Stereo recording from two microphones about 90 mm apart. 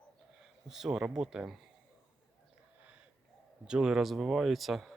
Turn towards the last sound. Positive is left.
turn(degrees=0)  # may be behind; listen again after turning